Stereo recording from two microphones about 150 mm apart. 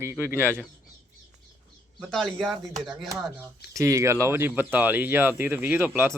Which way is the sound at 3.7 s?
20° right (ahead or behind).